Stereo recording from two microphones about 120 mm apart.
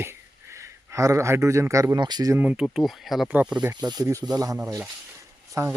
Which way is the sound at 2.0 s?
35° right (ahead or behind).